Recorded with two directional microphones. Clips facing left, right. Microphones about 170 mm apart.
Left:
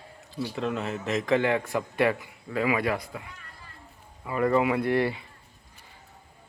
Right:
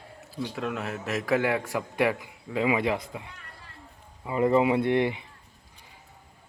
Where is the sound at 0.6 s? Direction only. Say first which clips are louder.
Left 3 dB; 5° right (ahead or behind); by 3.2 s 20° right (ahead or behind).